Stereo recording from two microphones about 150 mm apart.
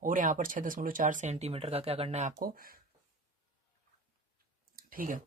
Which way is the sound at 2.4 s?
75° right (ahead or behind).